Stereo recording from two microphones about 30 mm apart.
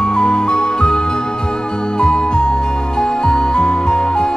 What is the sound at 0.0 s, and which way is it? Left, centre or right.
Music, left.